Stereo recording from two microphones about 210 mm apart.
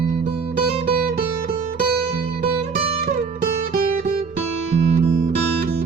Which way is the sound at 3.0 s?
40° right (ahead or behind).